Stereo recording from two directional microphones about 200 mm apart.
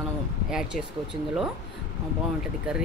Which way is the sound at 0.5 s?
5° right (ahead or behind).